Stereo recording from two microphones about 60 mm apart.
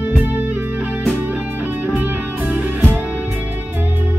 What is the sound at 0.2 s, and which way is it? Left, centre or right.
Music, right.